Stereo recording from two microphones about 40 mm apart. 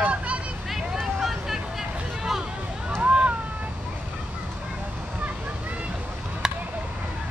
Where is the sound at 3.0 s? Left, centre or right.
Right.